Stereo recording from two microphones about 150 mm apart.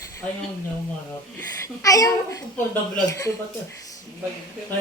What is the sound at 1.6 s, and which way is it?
Speech, 25° left (ahead or behind).